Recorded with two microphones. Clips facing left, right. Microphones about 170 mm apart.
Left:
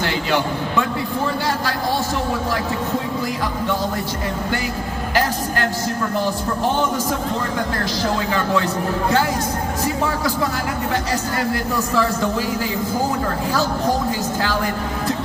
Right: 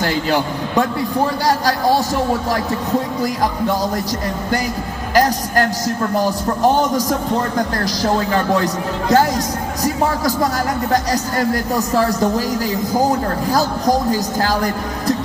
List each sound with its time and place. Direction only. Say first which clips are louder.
0.0 s a man's voice: right 3 dB; 40° right (ahead or behind)
3.2 s speech: right 4 dB; 40° right (ahead or behind)
5.1 s speech: right 6 dB; 40° right (ahead or behind)
6.7 s speech: right 4 dB; 40° right (ahead or behind)